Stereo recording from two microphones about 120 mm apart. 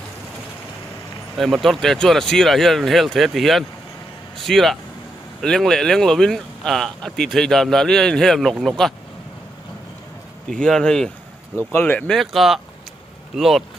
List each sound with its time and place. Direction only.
1.4 s speech: centre (ahead or behind)
10.5 s speech: 5° left (ahead or behind)
11.7 s speech: 15° left (ahead or behind)
12.1 s speech: centre (ahead or behind)